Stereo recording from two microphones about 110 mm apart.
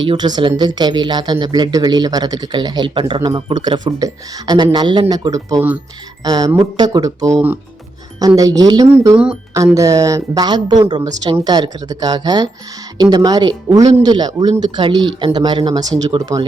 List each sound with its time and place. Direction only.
0.1 s speech: 40° right (ahead or behind)
8.4 s speech: 35° right (ahead or behind)
9.1 s speech: 10° right (ahead or behind)
9.7 s speech: 30° right (ahead or behind)